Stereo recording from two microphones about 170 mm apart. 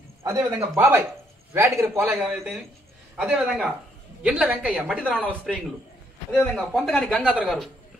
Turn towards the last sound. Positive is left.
turn(degrees=0)  # may be behind; listen again after turning